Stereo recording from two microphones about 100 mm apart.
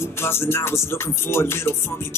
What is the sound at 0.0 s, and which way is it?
Music, 25° left (ahead or behind).